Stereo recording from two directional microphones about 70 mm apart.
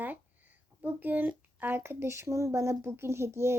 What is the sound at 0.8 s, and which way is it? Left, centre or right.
Speech, right.